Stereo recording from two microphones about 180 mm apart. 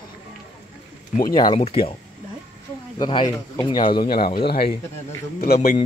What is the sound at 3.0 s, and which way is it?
Speech, 25° left (ahead or behind).